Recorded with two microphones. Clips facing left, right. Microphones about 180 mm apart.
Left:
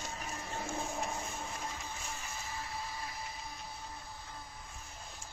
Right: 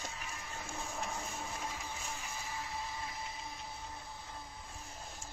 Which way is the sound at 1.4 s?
5° right (ahead or behind).